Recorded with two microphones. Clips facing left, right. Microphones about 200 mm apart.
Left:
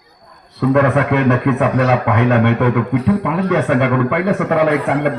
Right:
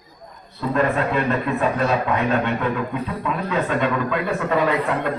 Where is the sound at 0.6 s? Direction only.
75° left (ahead or behind).